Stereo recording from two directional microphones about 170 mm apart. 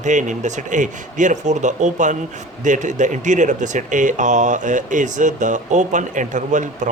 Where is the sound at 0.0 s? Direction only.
45° right (ahead or behind).